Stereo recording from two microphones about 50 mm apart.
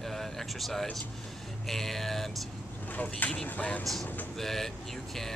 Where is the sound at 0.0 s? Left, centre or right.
Centre.